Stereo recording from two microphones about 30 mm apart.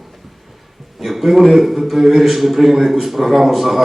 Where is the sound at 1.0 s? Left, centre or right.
Centre.